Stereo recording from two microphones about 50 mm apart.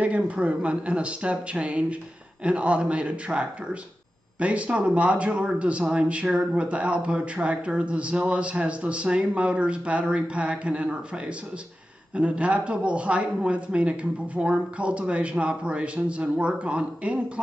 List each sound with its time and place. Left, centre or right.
0.0 s a man's voice: right